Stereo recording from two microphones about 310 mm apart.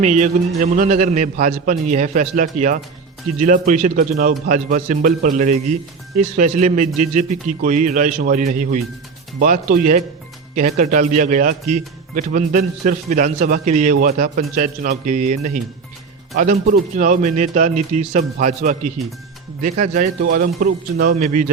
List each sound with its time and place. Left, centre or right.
0.0 s speech: right
6.6 s speech: right